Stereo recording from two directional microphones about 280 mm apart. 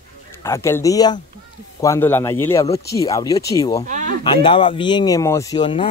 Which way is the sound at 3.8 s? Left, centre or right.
Right.